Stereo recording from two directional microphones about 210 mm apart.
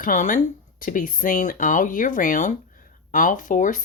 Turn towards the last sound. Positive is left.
turn(degrees=40)  # may be behind; listen again after turning